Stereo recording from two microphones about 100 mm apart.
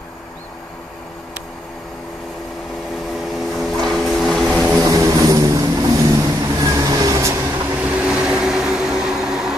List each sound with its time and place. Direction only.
3.3 s vehicle: centre (ahead or behind)
4.8 s vehicle: 35° right (ahead or behind)
7.7 s vehicle: 15° right (ahead or behind)